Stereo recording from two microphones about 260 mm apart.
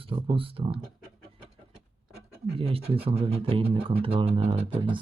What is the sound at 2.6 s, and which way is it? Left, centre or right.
Speech, right.